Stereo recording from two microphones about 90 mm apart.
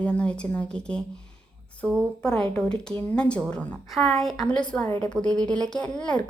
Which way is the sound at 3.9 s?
5° left (ahead or behind).